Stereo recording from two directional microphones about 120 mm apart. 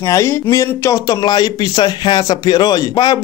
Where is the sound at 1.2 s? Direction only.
35° left (ahead or behind).